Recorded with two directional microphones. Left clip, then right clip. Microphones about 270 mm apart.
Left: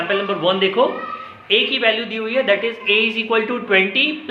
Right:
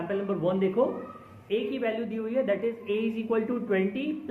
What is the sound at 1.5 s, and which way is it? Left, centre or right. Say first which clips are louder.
A man's voice: left 13 dB; centre.